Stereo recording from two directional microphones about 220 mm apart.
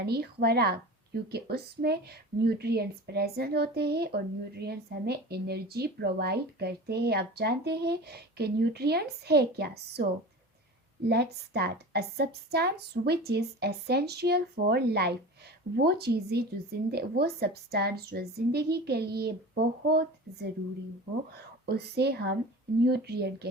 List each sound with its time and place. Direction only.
0.0 s a woman's voice: 45° right (ahead or behind)
11.1 s a woman's voice: 45° right (ahead or behind)